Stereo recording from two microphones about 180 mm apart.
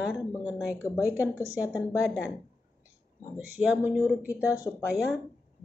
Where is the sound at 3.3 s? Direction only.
10° right (ahead or behind).